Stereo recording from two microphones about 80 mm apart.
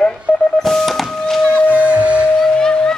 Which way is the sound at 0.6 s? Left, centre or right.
Centre.